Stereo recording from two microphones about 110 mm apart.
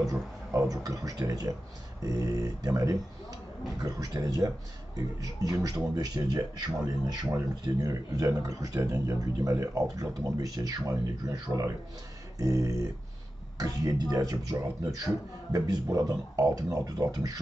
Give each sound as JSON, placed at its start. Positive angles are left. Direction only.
{"t": 0.0, "sound": "speech", "side_deg": -30}
{"t": 11.5, "sound": "speech", "side_deg": 5}
{"t": 12.4, "sound": "speech", "side_deg": -30}